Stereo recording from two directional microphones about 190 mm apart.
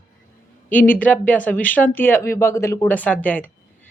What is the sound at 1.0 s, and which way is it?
A man's voice, 10° left (ahead or behind).